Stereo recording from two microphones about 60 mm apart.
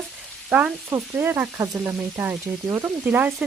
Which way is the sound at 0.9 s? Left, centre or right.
Right.